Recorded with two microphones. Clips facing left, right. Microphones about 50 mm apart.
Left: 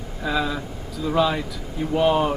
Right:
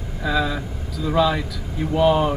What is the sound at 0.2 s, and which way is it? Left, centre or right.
Speech, centre.